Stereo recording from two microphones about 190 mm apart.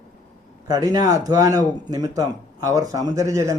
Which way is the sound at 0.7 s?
20° right (ahead or behind).